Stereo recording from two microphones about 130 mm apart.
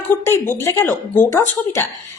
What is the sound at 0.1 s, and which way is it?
Speech, 20° left (ahead or behind).